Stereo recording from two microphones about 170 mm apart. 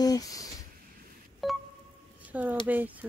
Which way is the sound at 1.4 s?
Centre (ahead or behind).